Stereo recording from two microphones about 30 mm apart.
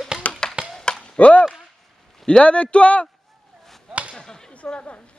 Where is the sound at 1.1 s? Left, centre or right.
Left.